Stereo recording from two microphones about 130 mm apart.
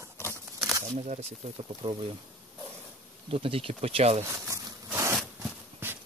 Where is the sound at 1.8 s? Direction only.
40° right (ahead or behind).